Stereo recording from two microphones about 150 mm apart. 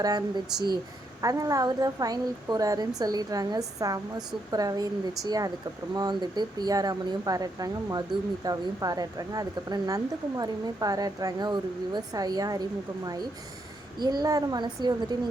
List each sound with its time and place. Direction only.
0.0 s speech: 25° right (ahead or behind)
14.0 s speech: 25° right (ahead or behind)